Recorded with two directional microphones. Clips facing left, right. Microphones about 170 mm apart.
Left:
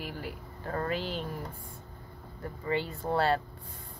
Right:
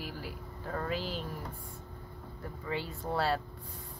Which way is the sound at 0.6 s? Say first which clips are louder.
Left 3 dB; 60° left (ahead or behind).